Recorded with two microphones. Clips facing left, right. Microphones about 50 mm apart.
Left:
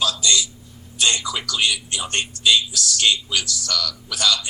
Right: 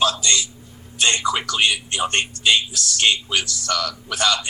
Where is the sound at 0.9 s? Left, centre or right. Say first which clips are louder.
Right 2 dB; right.